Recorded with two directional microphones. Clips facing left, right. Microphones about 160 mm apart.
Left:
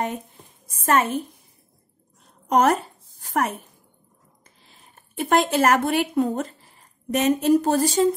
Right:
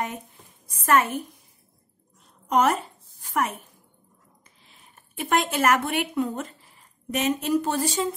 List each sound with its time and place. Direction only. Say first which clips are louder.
0.8 s a woman's voice: left 1 dB; 25° left (ahead or behind)
2.5 s speech: left 3 dB; 40° left (ahead or behind)
4.6 s a woman's voice: left 2 dB; 35° left (ahead or behind)